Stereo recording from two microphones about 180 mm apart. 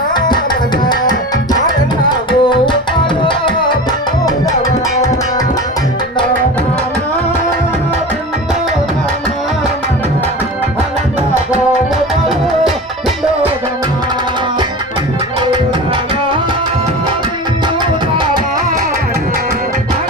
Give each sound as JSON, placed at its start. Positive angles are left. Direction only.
{"t": 2.0, "sound": "tabla", "side_deg": 25}
{"t": 3.2, "sound": "music", "side_deg": 25}